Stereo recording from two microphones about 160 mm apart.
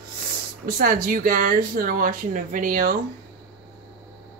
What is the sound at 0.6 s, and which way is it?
Speech, 60° right (ahead or behind).